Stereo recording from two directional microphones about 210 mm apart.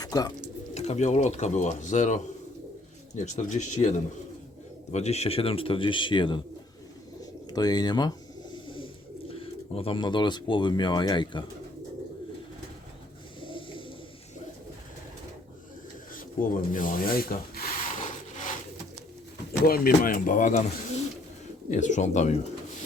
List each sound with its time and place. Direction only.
0.0 s speech: 20° left (ahead or behind)
0.7 s speech: 30° left (ahead or behind)
7.5 s bird: 20° left (ahead or behind)
9.3 s speech: 25° left (ahead or behind)
13.4 s bird: 25° left (ahead or behind)
16.1 s rub: 40° left (ahead or behind)
19.6 s speech: 45° left (ahead or behind)
21.7 s speech: 35° left (ahead or behind)